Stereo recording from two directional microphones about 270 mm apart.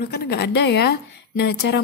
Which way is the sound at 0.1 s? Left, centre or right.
Left.